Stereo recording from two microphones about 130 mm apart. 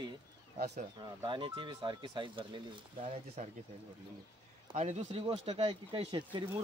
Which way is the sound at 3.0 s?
70° right (ahead or behind).